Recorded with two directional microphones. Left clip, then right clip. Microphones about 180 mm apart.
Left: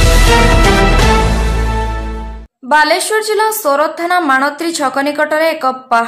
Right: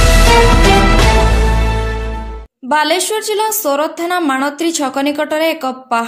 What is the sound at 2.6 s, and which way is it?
A woman's voice, 30° right (ahead or behind).